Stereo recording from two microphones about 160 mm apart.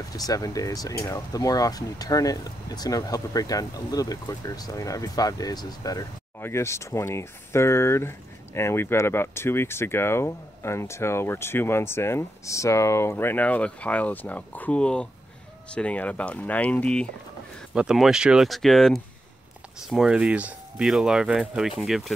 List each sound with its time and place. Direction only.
0.1 s speech: 20° left (ahead or behind); by 22.1 s centre (ahead or behind)